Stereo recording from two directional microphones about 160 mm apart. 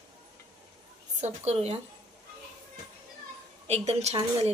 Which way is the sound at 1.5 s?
40° right (ahead or behind).